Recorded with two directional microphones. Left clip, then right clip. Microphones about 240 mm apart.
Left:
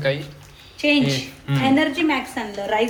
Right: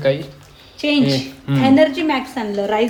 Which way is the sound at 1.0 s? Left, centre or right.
Centre.